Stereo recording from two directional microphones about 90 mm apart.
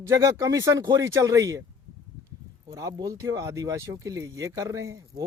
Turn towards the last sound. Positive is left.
turn(degrees=-40)  # may be behind; listen again after turning